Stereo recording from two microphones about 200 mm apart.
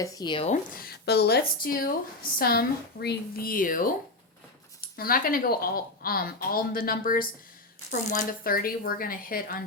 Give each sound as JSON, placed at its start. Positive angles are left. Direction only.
{"t": 0.0, "sound": "speech", "side_deg": 20}
{"t": 0.5, "sound": "speech", "side_deg": 45}